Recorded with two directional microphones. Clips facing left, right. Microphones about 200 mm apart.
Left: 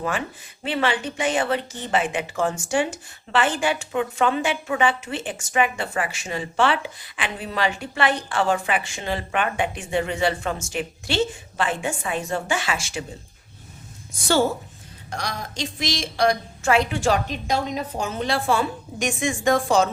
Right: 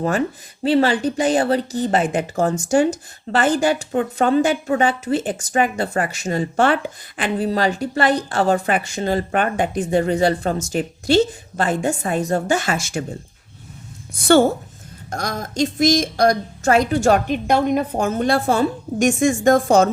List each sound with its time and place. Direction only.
0.6 s speech: 40° right (ahead or behind)
15.1 s a woman's voice: 45° right (ahead or behind)